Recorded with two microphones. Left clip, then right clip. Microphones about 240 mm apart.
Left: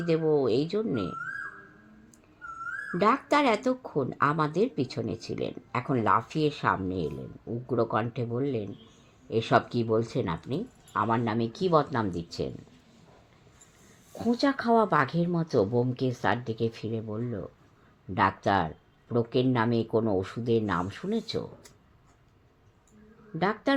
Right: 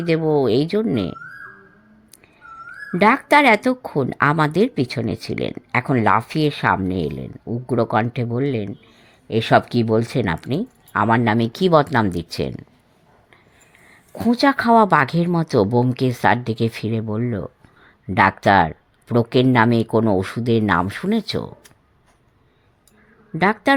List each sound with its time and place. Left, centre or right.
0.0 s speech: right
2.9 s speech: right
14.2 s speech: right
23.4 s speech: right